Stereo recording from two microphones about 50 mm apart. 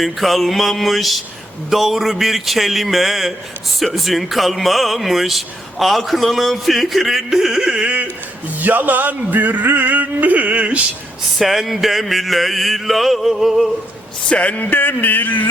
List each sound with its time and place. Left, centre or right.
0.0 s music: centre
8.5 s music: right
11.3 s music: centre
14.3 s speech: left